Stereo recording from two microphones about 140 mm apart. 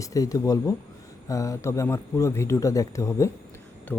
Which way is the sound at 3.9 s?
10° left (ahead or behind).